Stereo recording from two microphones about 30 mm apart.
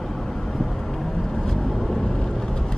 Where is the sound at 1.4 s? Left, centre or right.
Centre.